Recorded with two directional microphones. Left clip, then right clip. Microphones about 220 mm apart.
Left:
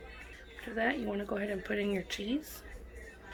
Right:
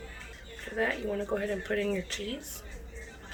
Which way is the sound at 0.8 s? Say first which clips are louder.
Right 3 dB; 35° left (ahead or behind).